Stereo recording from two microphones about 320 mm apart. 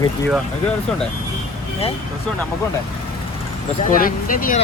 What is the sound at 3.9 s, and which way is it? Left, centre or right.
Speech, left.